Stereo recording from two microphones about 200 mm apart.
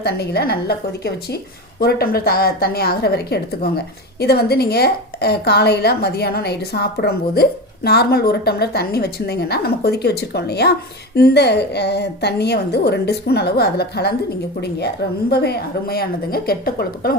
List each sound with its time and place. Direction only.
0.0 s a woman's voice: 55° left (ahead or behind)